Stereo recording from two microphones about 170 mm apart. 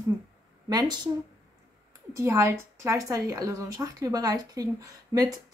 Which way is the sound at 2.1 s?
15° right (ahead or behind).